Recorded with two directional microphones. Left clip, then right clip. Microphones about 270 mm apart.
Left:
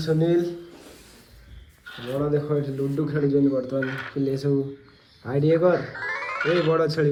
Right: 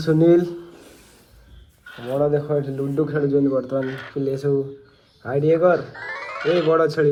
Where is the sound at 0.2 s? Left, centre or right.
Right.